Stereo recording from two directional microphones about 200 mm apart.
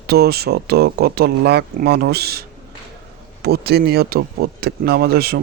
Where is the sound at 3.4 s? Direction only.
50° right (ahead or behind).